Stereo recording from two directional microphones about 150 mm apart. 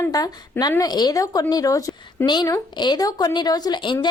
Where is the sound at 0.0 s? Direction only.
25° left (ahead or behind).